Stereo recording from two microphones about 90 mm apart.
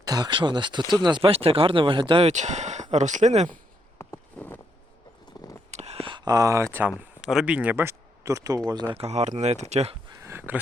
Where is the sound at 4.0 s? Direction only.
25° left (ahead or behind).